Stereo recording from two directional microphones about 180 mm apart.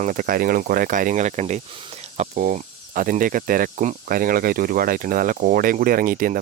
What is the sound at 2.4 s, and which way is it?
Speech, 50° right (ahead or behind).